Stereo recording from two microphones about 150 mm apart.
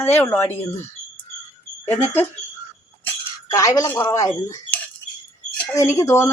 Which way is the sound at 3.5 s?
25° left (ahead or behind).